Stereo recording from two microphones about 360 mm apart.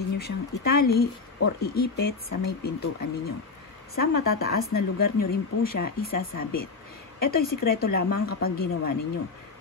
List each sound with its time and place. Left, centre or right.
0.2 s speech: left